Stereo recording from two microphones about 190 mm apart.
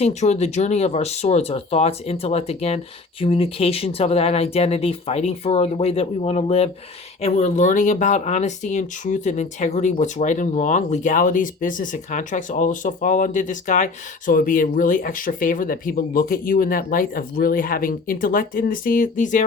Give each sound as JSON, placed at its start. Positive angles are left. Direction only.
{"t": 0.0, "sound": "speech", "side_deg": 35}